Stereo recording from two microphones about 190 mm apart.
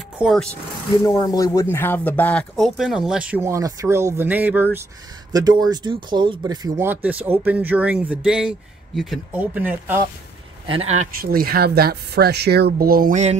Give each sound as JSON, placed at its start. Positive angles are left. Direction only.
{"t": 0.2, "sound": "speech", "side_deg": 0}
{"t": 1.0, "sound": "speech", "side_deg": 20}
{"t": 5.3, "sound": "speech", "side_deg": -20}
{"t": 6.9, "sound": "speech", "side_deg": -10}
{"t": 10.7, "sound": "speech", "side_deg": -35}
{"t": 11.1, "sound": "speech", "side_deg": -50}